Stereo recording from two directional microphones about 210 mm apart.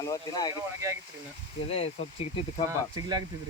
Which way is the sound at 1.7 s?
30° left (ahead or behind).